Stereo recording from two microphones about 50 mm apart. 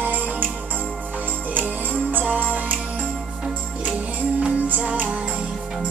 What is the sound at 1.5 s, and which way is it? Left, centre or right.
Music, right.